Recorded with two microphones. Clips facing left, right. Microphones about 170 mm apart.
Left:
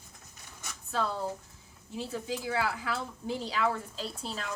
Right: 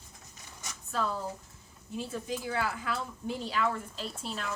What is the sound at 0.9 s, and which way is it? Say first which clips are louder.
A woman's voice: left 1 dB; 35° left (ahead or behind).